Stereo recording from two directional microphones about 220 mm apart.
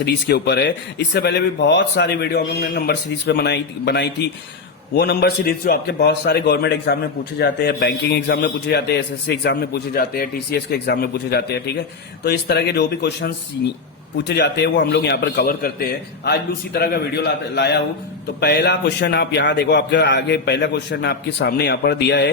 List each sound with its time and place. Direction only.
0.0 s a man's voice: 45° left (ahead or behind)